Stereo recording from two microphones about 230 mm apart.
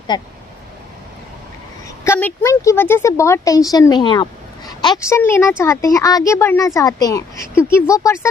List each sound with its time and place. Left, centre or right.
0.1 s speech: centre
2.0 s speech: centre